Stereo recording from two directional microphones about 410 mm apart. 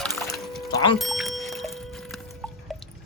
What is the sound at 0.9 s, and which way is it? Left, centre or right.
Bicycle bell, centre.